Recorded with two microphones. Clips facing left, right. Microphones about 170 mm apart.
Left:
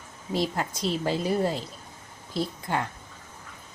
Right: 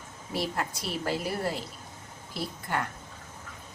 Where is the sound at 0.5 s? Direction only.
20° left (ahead or behind).